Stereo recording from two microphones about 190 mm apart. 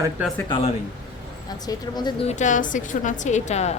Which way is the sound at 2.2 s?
40° left (ahead or behind).